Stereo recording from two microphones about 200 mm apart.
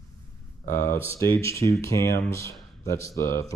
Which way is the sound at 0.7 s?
10° left (ahead or behind).